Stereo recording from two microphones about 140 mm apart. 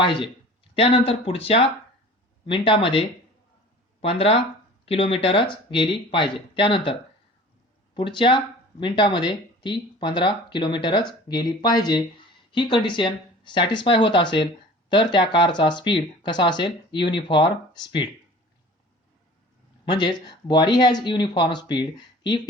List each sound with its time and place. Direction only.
0.0 s speech: 35° left (ahead or behind)
7.9 s speech: 35° left (ahead or behind)
19.8 s speech: 30° left (ahead or behind)